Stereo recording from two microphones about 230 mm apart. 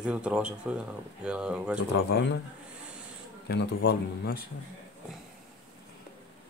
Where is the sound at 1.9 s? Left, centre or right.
Left.